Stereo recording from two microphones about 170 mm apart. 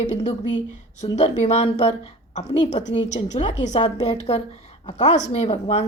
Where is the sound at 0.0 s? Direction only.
40° left (ahead or behind).